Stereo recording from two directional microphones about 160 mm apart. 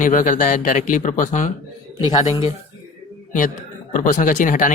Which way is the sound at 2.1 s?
25° left (ahead or behind).